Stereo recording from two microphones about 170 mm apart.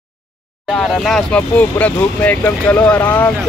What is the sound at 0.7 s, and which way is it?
Speech, centre (ahead or behind).